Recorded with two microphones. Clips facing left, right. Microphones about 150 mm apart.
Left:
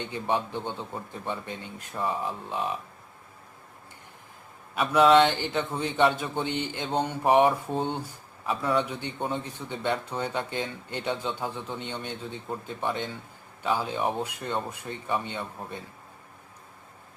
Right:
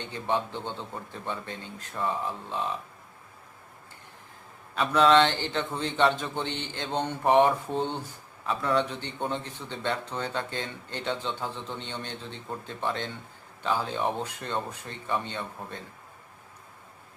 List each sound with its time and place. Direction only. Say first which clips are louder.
0.0 s a man's voice: left 1 dB; 15° left (ahead or behind)
4.7 s a man's voice: left 2 dB; 10° left (ahead or behind)